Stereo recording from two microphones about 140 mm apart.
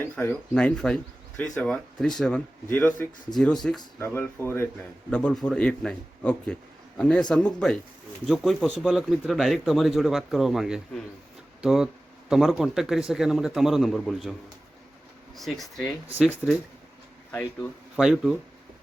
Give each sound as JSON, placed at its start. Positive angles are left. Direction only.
{"t": 0.0, "sound": "speech", "side_deg": 15}
{"t": 3.9, "sound": "speech", "side_deg": 15}
{"t": 15.4, "sound": "speech", "side_deg": 0}
{"t": 16.0, "sound": "speech", "side_deg": -10}
{"t": 17.9, "sound": "speech", "side_deg": -5}